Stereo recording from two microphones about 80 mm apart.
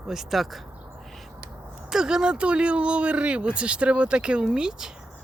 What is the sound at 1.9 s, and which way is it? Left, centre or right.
Speech, centre.